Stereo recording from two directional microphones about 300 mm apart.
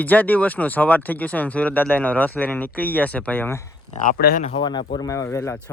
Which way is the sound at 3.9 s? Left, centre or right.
Left.